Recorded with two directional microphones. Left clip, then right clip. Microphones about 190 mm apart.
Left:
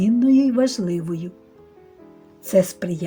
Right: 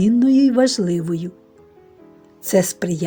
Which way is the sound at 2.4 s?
45° right (ahead or behind).